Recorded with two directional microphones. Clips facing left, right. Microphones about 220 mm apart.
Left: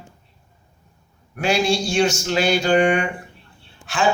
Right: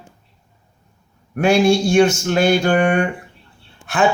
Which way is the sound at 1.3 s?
55° right (ahead or behind).